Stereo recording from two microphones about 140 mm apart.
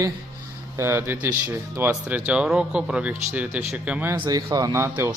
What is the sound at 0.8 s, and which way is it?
Speech, 15° right (ahead or behind).